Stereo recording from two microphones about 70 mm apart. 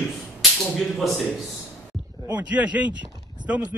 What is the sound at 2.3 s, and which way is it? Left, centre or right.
Speech, centre.